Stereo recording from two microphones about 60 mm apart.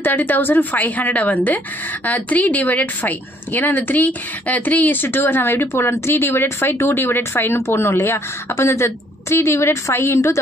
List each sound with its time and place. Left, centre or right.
0.0 s a woman's voice: left